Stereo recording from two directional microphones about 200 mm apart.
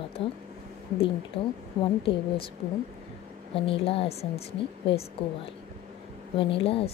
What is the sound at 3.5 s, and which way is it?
Speech, 25° left (ahead or behind).